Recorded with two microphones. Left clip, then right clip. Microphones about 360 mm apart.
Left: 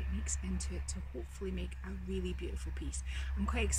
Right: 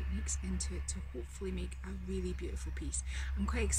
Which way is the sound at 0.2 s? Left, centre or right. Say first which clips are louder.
Right 1 dB; centre.